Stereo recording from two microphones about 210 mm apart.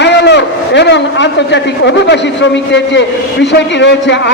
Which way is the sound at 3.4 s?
55° left (ahead or behind).